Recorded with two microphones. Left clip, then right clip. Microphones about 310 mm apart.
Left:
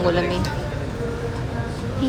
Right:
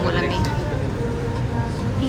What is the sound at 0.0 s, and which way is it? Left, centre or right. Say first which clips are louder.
Speech: left 2 dB; centre.